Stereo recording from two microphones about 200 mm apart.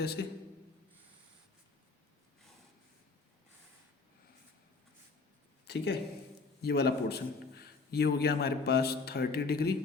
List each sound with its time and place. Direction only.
0.0 s a man's voice: 55° left (ahead or behind)
5.6 s a man's voice: 55° left (ahead or behind)